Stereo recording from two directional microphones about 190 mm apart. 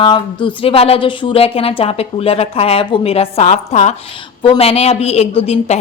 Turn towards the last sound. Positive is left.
turn(degrees=35)  # may be behind; listen again after turning